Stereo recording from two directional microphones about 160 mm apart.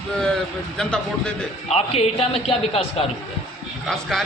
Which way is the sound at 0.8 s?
5° left (ahead or behind).